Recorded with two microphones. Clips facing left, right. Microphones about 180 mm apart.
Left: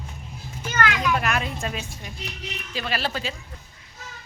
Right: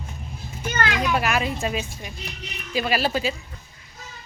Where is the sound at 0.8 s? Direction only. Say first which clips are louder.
Left 1 dB; 35° right (ahead or behind).